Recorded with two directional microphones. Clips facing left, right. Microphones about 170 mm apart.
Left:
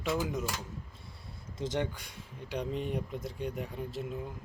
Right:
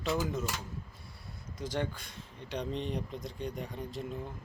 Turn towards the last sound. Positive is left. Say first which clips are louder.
# left 1 dB
turn(degrees=5)  # may be behind; listen again after turning